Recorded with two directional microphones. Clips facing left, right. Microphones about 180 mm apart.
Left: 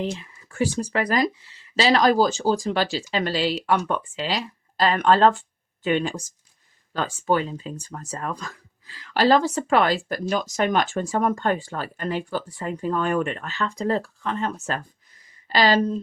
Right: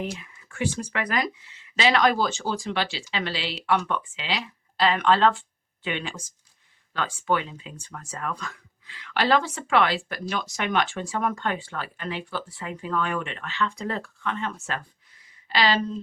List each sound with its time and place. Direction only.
0.0 s speech: 30° left (ahead or behind)